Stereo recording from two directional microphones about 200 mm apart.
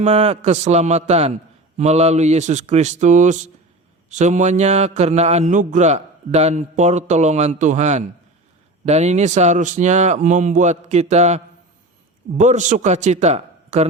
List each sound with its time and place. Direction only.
0.0 s a man's voice: 35° right (ahead or behind)